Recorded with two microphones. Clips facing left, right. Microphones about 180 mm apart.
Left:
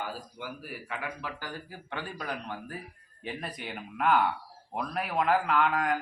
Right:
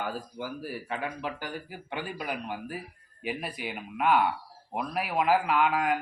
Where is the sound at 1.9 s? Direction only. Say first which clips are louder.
Right 2 dB; 15° right (ahead or behind).